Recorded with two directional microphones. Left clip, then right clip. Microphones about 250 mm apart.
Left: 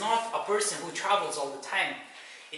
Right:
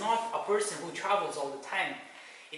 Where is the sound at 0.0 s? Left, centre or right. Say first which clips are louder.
Left 2 dB; centre.